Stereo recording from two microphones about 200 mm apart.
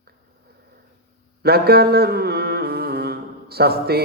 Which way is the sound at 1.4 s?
50° right (ahead or behind).